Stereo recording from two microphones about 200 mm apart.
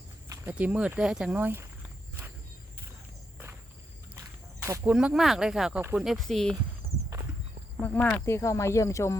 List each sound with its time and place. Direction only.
0.3 s speech: 10° right (ahead or behind)
4.6 s speech: 15° right (ahead or behind)
4.9 s speech: 5° right (ahead or behind)
7.1 s horse: 20° right (ahead or behind)
7.8 s speech: 5° left (ahead or behind)